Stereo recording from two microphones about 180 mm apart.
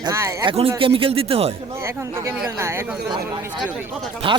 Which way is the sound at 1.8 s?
15° right (ahead or behind).